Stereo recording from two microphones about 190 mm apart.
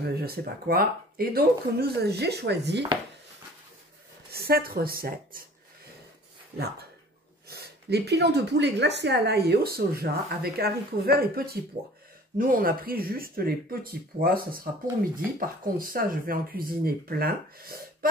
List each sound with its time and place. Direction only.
0.0 s speech: 55° right (ahead or behind)
4.3 s speech: 55° right (ahead or behind)
7.4 s speech: 60° right (ahead or behind)